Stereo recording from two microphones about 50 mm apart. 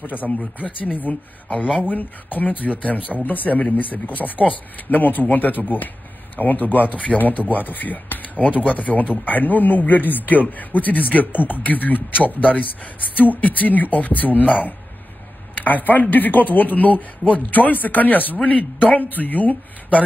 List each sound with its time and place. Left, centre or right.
0.0 s speech: left
15.6 s speech: left